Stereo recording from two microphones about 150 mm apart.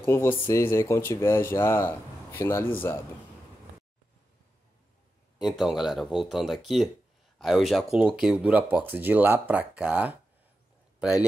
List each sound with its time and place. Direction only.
0.0 s speech: 15° left (ahead or behind)
5.4 s speech: centre (ahead or behind)